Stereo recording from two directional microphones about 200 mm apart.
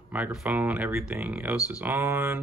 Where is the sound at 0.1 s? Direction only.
5° right (ahead or behind).